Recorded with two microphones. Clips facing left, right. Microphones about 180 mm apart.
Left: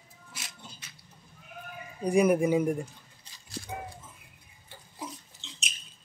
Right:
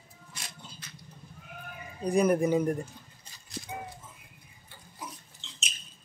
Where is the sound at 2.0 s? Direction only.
10° left (ahead or behind).